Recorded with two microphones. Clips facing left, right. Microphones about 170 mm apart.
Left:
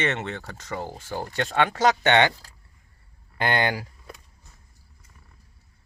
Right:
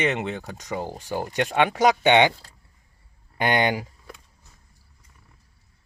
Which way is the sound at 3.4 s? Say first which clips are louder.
Right 2 dB; 20° right (ahead or behind).